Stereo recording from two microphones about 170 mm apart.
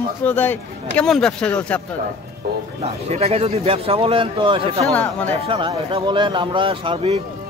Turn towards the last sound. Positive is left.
turn(degrees=-30)  # may be behind; listen again after turning